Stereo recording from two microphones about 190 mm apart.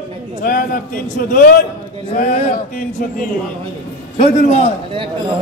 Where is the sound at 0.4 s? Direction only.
45° left (ahead or behind).